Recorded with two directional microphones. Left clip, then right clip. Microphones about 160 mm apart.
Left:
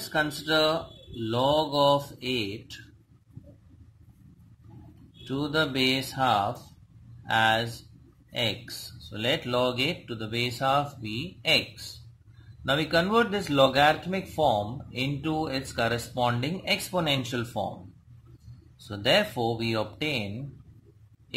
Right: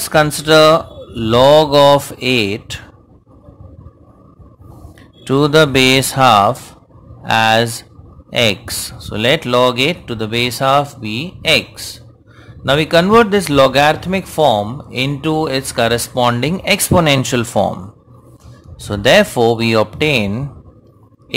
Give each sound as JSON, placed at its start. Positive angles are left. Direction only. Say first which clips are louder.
{"t": 0.1, "sound": "speech", "louder": "right 15 dB", "side_deg": -60}
{"t": 5.2, "sound": "speech", "louder": "right 17 dB", "side_deg": -60}
{"t": 18.9, "sound": "speech", "louder": "right 13 dB", "side_deg": -50}